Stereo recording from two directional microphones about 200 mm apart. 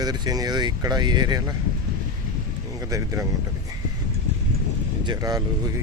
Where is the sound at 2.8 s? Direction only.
15° right (ahead or behind).